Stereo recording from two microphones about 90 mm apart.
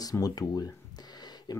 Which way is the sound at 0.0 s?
45° left (ahead or behind).